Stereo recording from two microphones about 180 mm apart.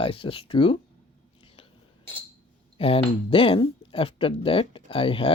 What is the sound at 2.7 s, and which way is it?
Speech, 30° left (ahead or behind).